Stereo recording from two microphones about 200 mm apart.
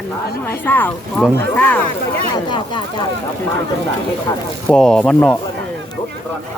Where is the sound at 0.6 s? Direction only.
10° left (ahead or behind).